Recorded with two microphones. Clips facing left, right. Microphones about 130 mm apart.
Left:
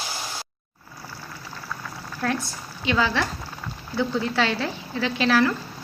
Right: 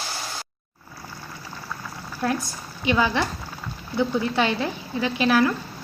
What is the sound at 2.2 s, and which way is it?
Speech, 15° right (ahead or behind).